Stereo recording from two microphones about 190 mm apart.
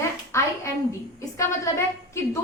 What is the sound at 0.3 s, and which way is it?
A child's voice, 15° left (ahead or behind).